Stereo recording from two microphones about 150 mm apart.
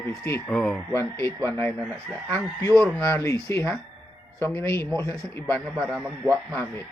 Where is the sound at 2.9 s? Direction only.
20° left (ahead or behind).